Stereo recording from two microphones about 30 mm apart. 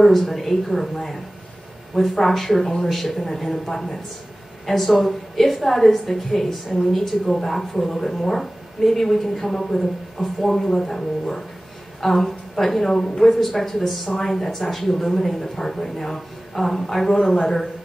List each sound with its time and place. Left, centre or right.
0.0 s a woman's voice: centre
12.8 s speech: centre
13.2 s a woman's voice: centre